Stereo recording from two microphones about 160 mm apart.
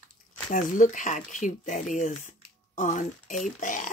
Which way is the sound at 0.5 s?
50° left (ahead or behind).